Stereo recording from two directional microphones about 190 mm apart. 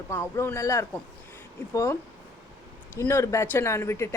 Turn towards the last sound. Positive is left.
turn(degrees=15)  # may be behind; listen again after turning